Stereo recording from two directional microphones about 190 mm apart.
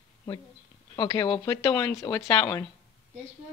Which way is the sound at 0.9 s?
20° left (ahead or behind).